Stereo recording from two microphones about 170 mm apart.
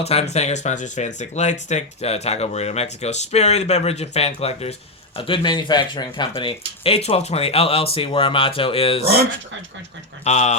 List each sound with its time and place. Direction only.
0.0 s speech: 40° left (ahead or behind)
10.2 s speech: 40° left (ahead or behind)